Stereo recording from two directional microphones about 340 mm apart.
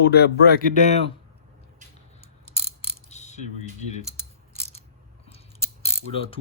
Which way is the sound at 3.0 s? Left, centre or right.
Centre.